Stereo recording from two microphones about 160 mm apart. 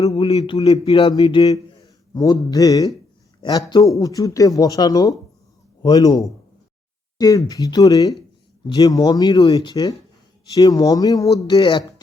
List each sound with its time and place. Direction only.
0.3 s a man's voice: 35° left (ahead or behind)
1.5 s speech: 20° left (ahead or behind)